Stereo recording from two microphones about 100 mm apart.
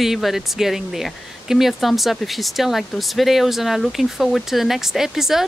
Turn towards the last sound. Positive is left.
turn(degrees=-5)  # may be behind; listen again after turning